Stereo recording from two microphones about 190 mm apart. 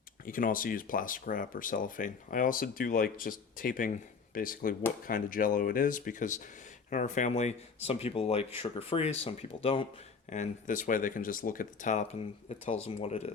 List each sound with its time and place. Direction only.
0.3 s speech: 45° left (ahead or behind); by 9.8 s 30° left (ahead or behind)
10.2 s speech: 40° left (ahead or behind)